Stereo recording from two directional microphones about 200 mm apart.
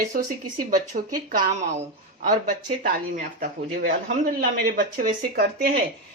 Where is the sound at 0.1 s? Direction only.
40° right (ahead or behind).